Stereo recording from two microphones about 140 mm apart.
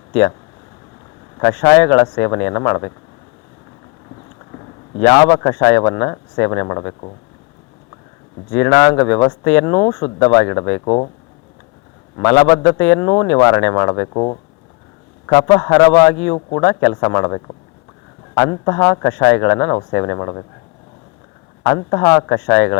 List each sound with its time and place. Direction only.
0.1 s speech: 15° left (ahead or behind)
1.4 s speech: 10° left (ahead or behind)
4.4 s a sound: 25° left (ahead or behind)
5.0 s speech: 10° left (ahead or behind)
8.4 s speech: 20° left (ahead or behind)
12.2 s speech: 10° left (ahead or behind)
14.1 s speech: 35° left (ahead or behind)
15.3 s speech: 10° left (ahead or behind)
16.3 s speech: 30° left (ahead or behind)
17.0 s speech: 15° left (ahead or behind)
18.5 s speech: 25° left (ahead or behind)
18.9 s speech: 15° left (ahead or behind)
21.8 s speech: 25° left (ahead or behind)